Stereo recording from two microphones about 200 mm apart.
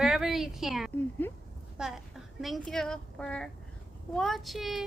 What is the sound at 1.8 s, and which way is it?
A woman's voice, 5° right (ahead or behind).